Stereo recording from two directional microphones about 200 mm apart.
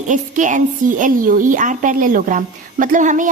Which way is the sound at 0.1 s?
40° right (ahead or behind).